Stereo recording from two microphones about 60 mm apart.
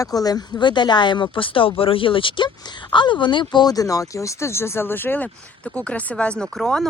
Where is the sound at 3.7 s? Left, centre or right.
Left.